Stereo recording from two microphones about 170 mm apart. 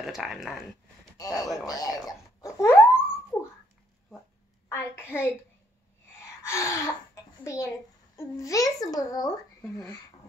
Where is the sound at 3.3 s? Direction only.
15° left (ahead or behind).